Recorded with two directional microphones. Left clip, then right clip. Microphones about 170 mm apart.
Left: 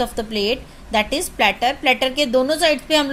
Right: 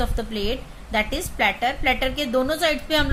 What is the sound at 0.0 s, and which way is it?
A woman's voice, 20° left (ahead or behind).